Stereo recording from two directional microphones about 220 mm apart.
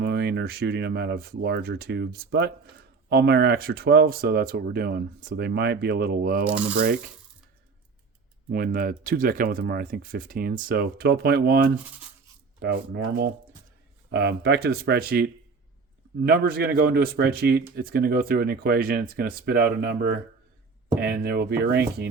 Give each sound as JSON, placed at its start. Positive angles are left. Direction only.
{"t": 0.0, "sound": "speech", "side_deg": -50}
{"t": 8.4, "sound": "speech", "side_deg": -40}